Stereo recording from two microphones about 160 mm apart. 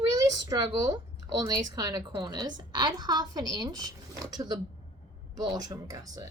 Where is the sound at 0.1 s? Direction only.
25° right (ahead or behind).